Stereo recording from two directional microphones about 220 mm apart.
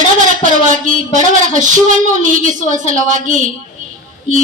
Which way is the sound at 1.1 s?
35° right (ahead or behind).